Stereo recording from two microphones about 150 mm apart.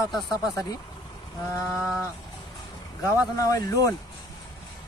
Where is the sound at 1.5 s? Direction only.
20° left (ahead or behind).